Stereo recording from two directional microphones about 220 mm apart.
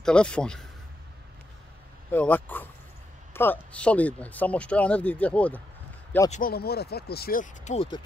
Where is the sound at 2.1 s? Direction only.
10° left (ahead or behind).